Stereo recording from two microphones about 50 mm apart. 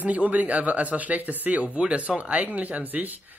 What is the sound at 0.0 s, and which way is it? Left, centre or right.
Speech, right.